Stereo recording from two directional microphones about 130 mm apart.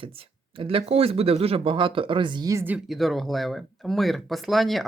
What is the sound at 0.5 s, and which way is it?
Speech, 45° right (ahead or behind).